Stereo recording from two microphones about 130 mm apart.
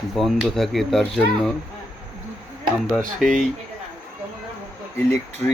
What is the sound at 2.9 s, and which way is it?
Speech, centre (ahead or behind).